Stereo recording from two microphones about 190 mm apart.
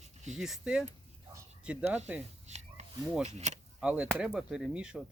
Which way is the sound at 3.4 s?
40° right (ahead or behind).